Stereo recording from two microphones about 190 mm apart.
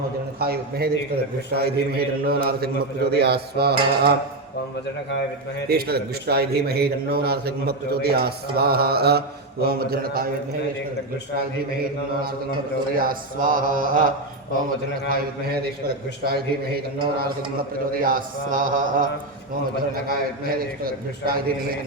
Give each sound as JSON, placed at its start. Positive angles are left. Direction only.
{"t": 0.3, "sound": "a man's voice", "side_deg": -55}
{"t": 5.6, "sound": "a man's voice", "side_deg": -55}
{"t": 13.0, "sound": "a man's voice", "side_deg": -50}
{"t": 16.2, "sound": "a man's voice", "side_deg": -55}
{"t": 17.9, "sound": "a man's voice", "side_deg": -50}
{"t": 20.1, "sound": "a man's voice", "side_deg": -50}